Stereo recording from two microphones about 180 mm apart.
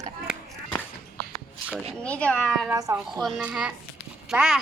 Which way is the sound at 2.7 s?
15° right (ahead or behind).